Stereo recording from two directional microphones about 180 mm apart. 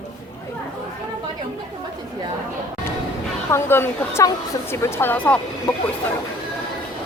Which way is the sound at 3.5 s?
15° left (ahead or behind).